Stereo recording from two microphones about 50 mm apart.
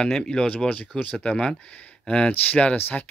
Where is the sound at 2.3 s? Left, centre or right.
Left.